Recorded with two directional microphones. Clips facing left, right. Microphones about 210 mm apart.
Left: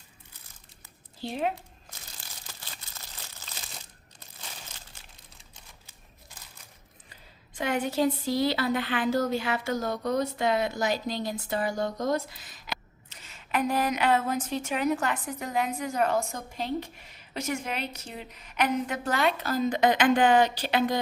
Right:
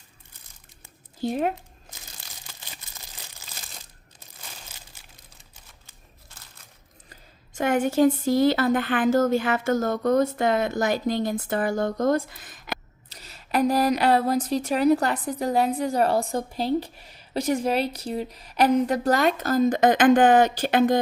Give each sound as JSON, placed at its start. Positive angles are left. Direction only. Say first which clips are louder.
{"t": 1.2, "sound": "a woman's voice", "louder": "right 5 dB", "side_deg": -45}
{"t": 2.2, "sound": "a sound", "louder": "right 1 dB", "side_deg": -20}
{"t": 3.4, "sound": "crumpling", "louder": "even", "side_deg": -10}
{"t": 7.1, "sound": "a woman's voice", "louder": "right 3 dB", "side_deg": -45}
{"t": 13.1, "sound": "a woman's voice", "louder": "right 3 dB", "side_deg": -40}